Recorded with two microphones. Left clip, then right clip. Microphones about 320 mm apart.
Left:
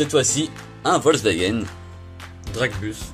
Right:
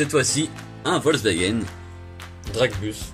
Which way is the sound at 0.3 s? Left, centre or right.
Centre.